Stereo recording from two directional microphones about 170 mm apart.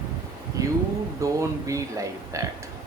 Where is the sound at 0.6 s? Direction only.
20° right (ahead or behind).